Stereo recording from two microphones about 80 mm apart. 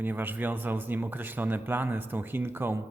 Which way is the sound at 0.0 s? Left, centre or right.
Right.